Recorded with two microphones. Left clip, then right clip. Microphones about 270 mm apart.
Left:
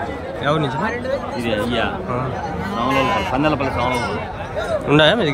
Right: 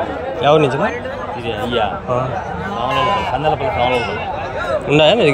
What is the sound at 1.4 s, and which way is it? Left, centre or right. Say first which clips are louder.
Speech: right 2 dB; left.